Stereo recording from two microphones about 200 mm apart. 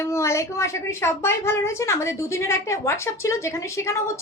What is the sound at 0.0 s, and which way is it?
A woman's voice, 15° left (ahead or behind).